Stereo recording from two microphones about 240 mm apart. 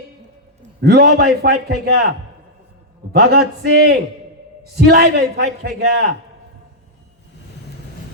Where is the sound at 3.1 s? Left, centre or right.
Right.